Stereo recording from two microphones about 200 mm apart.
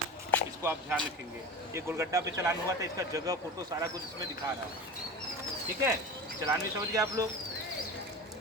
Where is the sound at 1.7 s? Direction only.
15° right (ahead or behind).